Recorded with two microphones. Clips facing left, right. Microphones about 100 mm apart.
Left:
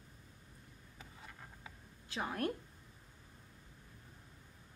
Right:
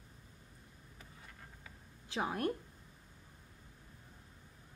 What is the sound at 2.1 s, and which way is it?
Speech, 15° right (ahead or behind).